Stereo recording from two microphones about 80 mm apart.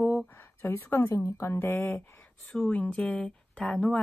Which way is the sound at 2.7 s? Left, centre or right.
Centre.